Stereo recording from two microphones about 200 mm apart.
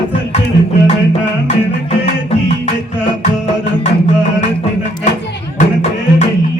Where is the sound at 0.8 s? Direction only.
35° left (ahead or behind).